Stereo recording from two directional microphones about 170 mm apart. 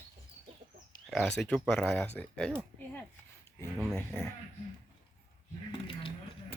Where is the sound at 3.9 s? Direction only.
5° left (ahead or behind).